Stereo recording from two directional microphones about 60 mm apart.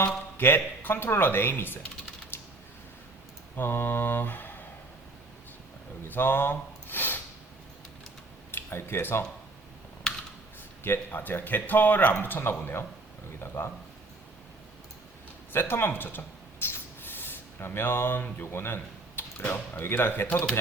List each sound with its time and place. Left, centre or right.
0.3 s a man's voice: left
2.3 s typing: left
3.5 s speech: left
6.1 s a sound: left
8.5 s speech: left
10.8 s a man's voice: left
15.5 s mouse: left
18.4 s a man's voice: left